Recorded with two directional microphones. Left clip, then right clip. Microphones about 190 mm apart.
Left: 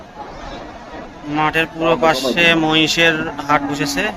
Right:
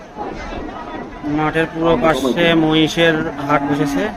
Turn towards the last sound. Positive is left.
turn(degrees=-20)  # may be behind; listen again after turning